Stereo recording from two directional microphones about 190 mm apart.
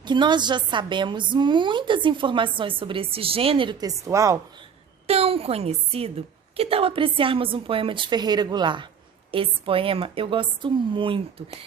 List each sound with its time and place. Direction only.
0.0 s a woman's voice: 25° right (ahead or behind)
5.0 s a woman's voice: 30° right (ahead or behind)